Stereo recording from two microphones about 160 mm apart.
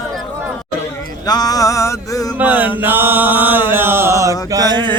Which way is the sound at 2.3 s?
10° right (ahead or behind).